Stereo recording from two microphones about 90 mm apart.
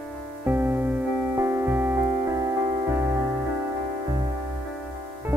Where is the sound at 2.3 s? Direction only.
40° right (ahead or behind).